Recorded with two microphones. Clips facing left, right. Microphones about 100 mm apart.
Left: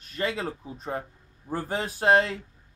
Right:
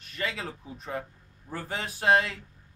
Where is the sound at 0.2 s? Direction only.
30° left (ahead or behind).